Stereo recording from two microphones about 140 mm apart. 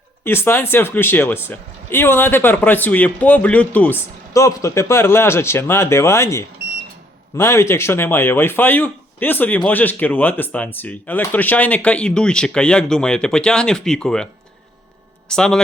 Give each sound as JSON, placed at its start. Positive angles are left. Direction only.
{"t": 0.3, "sound": "speech", "side_deg": 15}
{"t": 4.4, "sound": "speech", "side_deg": 20}
{"t": 15.3, "sound": "a man's voice", "side_deg": 5}